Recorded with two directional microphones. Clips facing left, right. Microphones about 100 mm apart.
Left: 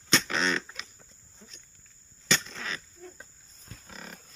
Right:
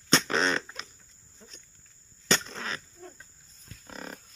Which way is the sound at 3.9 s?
35° right (ahead or behind).